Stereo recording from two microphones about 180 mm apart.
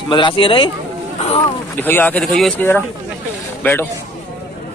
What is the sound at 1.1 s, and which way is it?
Boat, 35° left (ahead or behind).